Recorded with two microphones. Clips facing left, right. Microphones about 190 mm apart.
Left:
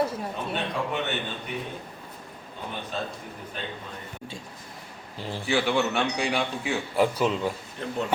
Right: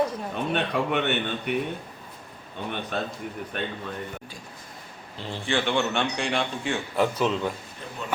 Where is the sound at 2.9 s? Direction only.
65° right (ahead or behind).